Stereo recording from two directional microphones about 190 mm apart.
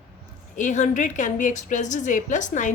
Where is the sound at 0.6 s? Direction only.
40° left (ahead or behind).